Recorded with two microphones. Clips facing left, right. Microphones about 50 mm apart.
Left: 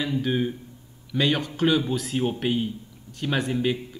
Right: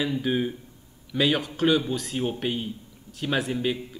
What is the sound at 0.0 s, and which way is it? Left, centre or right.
Speech, centre.